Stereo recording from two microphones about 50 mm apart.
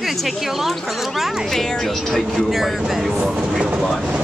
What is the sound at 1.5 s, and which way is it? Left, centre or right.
Speech, centre.